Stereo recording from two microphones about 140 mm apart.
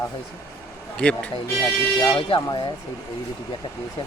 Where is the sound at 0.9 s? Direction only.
5° left (ahead or behind).